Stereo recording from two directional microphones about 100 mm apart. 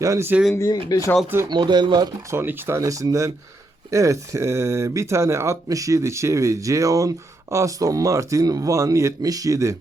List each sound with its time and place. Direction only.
0.0 s speech: 30° right (ahead or behind)
0.9 s speech: 35° left (ahead or behind)
1.5 s speech: 45° right (ahead or behind)
2.3 s speech: 20° right (ahead or behind)